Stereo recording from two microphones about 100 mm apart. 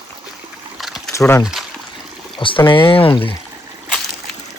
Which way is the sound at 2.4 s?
60° left (ahead or behind).